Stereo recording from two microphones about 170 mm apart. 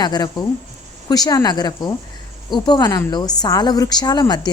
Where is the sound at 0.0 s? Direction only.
25° left (ahead or behind).